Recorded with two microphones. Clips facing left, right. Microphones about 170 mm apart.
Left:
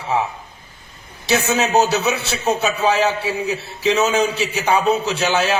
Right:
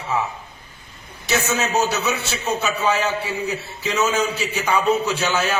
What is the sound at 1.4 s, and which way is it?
Speech, 65° left (ahead or behind).